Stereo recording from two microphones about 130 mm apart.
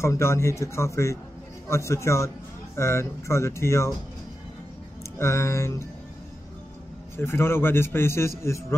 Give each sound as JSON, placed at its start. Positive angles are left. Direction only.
{"t": 0.0, "sound": "speech", "side_deg": 20}
{"t": 5.2, "sound": "speech", "side_deg": 20}
{"t": 7.2, "sound": "speech", "side_deg": 20}